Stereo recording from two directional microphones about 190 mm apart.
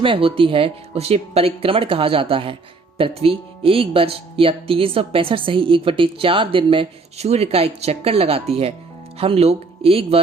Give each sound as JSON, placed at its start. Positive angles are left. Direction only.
{"t": 0.0, "sound": "speech", "side_deg": -30}